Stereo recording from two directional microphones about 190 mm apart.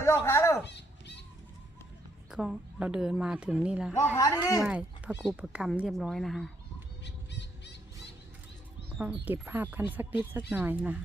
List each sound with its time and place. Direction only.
0.0 s fowl: 15° left (ahead or behind)
0.6 s fowl: 65° left (ahead or behind)
2.3 s speech: centre (ahead or behind)
4.0 s speech: 15° left (ahead or behind)
4.6 s speech: 5° right (ahead or behind)
7.0 s squawk: 65° left (ahead or behind)
9.0 s speech: 10° right (ahead or behind)